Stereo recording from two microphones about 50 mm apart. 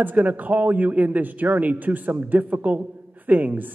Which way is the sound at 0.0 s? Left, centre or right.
Right.